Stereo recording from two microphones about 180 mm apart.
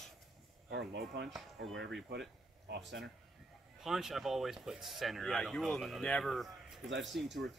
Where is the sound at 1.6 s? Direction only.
80° right.